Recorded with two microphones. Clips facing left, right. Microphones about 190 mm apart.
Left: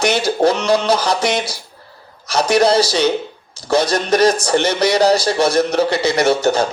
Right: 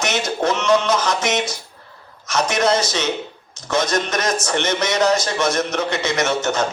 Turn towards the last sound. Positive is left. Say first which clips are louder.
# left 5 dB
turn(degrees=35)  # may be behind; listen again after turning